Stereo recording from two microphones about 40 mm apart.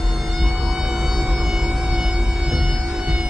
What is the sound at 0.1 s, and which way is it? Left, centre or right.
Siren, centre.